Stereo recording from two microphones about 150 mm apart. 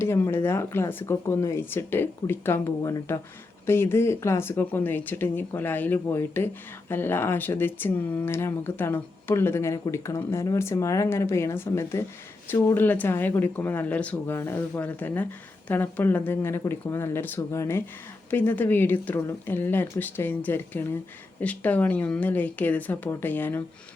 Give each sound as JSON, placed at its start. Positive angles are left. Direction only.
{"t": 0.0, "sound": "speech", "side_deg": 15}